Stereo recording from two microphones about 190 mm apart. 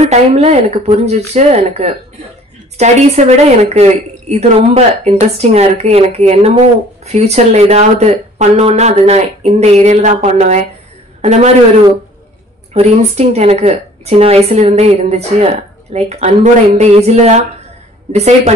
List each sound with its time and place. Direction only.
0.0 s a woman's voice: 35° right (ahead or behind)
12.7 s a woman's voice: 35° right (ahead or behind)